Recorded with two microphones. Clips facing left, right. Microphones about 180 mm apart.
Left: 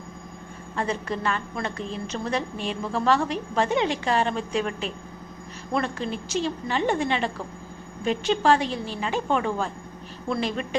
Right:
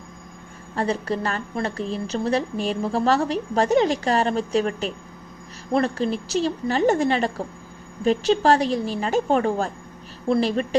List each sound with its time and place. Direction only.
0.8 s a woman's voice: 35° right (ahead or behind)